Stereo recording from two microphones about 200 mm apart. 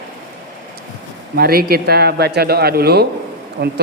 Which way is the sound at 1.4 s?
50° right (ahead or behind).